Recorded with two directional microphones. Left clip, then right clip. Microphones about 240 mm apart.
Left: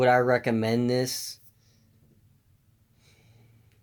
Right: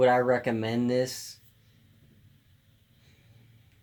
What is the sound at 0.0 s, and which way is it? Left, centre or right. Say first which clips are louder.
Speech: left 1 dB; left.